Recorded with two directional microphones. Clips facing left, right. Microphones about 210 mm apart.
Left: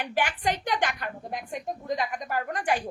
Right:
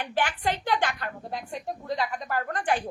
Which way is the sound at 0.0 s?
15° left (ahead or behind).